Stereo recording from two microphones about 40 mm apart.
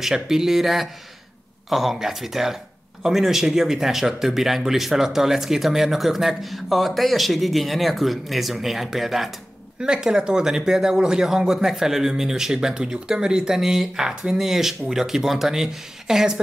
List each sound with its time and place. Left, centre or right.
0.0 s a man's voice: centre
9.8 s a man's voice: centre